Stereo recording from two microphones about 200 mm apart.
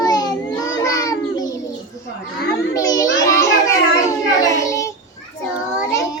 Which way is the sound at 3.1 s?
15° left (ahead or behind).